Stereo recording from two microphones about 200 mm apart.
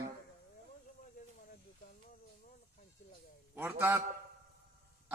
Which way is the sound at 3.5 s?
10° right (ahead or behind).